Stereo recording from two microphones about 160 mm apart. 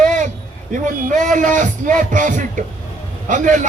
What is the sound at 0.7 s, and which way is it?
A man's voice, 55° right (ahead or behind).